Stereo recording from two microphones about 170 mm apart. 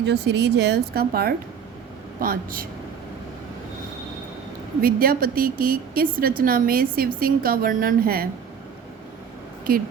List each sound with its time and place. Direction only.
0.0 s a woman's voice: 85° right; by 2.6 s 55° right (ahead or behind)
4.8 s a woman's voice: 60° right (ahead or behind)
9.7 s a woman's voice: 60° right (ahead or behind)